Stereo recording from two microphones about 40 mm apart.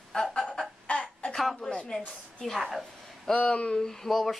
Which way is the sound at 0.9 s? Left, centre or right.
Left.